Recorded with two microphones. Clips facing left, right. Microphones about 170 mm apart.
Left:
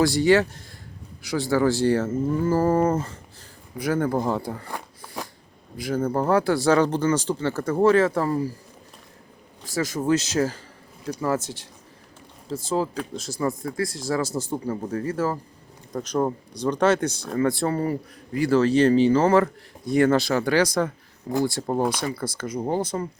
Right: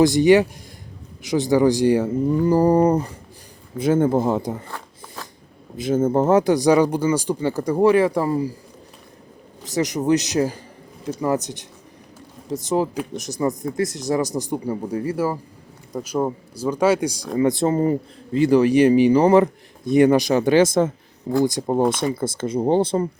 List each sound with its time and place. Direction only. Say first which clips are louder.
0.0 s speech: right 4 dB; 20° right (ahead or behind)
4.7 s a sound: left 1 dB; 15° left (ahead or behind)
5.7 s speech: right 6 dB; 25° right (ahead or behind)
9.6 s speech: right 3 dB; 20° right (ahead or behind)